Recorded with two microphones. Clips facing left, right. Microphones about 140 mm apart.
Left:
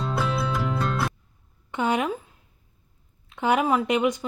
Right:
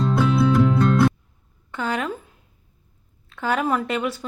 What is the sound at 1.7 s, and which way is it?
Speech, 20° left (ahead or behind).